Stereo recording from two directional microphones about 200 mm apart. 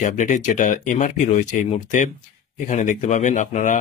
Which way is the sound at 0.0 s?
40° left (ahead or behind).